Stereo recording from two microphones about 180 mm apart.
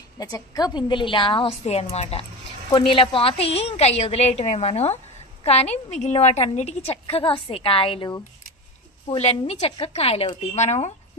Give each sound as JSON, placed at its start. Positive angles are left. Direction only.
{"t": 0.2, "sound": "a woman's voice", "side_deg": 20}